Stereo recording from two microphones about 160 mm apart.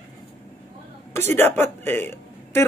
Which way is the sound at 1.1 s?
15° left (ahead or behind).